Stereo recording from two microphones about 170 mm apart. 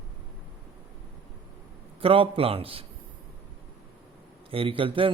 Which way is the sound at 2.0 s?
35° right (ahead or behind).